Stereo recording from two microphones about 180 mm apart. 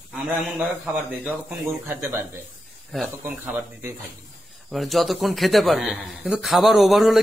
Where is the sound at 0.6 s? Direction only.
10° right (ahead or behind).